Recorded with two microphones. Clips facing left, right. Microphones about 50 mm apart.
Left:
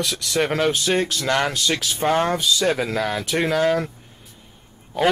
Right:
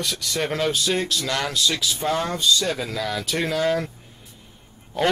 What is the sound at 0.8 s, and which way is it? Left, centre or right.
Speech, left.